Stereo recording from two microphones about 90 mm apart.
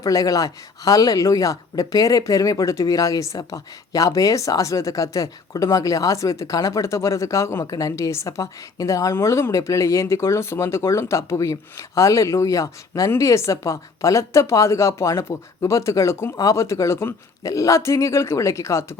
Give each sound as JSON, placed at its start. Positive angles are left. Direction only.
{"t": 0.0, "sound": "speech", "side_deg": 40}